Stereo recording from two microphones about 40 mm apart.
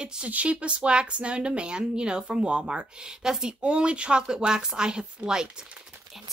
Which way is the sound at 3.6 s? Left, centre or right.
Right.